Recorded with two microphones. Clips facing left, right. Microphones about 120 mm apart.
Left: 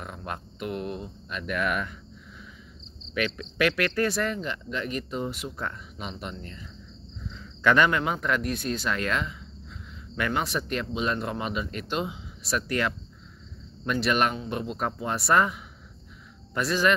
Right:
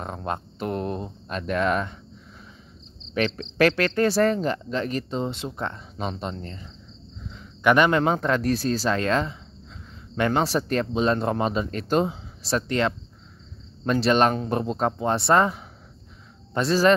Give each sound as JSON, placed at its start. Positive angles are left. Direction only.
{"t": 0.0, "sound": "speech", "side_deg": -30}
{"t": 3.2, "sound": "speech", "side_deg": -35}
{"t": 7.2, "sound": "cricket", "side_deg": -20}
{"t": 8.0, "sound": "speech", "side_deg": -30}
{"t": 14.3, "sound": "speech", "side_deg": -40}